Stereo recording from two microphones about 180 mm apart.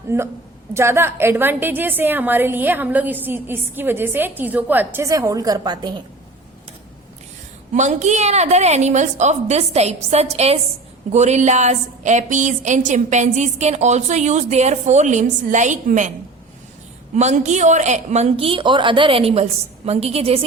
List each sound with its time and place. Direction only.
0.1 s a woman's voice: 10° right (ahead or behind)
7.7 s a woman's voice: 40° right (ahead or behind)
17.2 s a woman's voice: 40° right (ahead or behind)